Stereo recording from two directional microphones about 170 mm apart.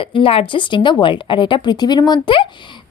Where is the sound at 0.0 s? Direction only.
30° left (ahead or behind).